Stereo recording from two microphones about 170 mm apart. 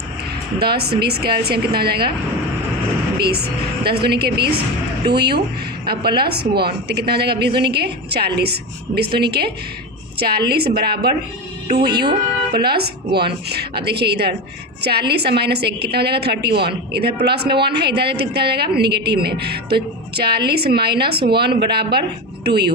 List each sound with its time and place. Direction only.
0.6 s a woman's voice: 70° right (ahead or behind)
3.2 s a woman's voice: 70° right (ahead or behind)